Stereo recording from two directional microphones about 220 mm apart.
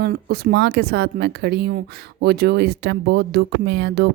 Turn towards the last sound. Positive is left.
turn(degrees=-50)  # may be behind; listen again after turning